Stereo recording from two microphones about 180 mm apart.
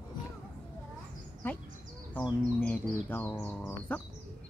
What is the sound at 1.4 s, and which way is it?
Music, 10° left (ahead or behind).